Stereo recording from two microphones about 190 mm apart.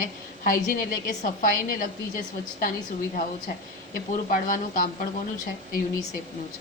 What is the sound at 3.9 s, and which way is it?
A woman's voice, 45° left (ahead or behind).